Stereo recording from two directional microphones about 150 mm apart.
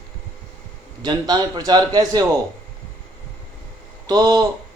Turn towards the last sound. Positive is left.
turn(degrees=-25)  # may be behind; listen again after turning